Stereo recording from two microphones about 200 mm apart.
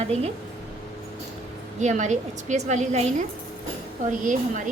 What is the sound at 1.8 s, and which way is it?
A woman's voice, 35° right (ahead or behind).